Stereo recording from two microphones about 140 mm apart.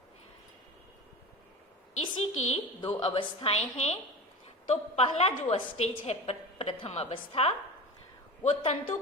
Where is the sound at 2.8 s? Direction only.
45° left (ahead or behind).